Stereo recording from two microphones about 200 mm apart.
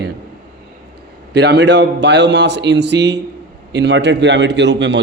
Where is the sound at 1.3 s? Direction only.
55° right (ahead or behind).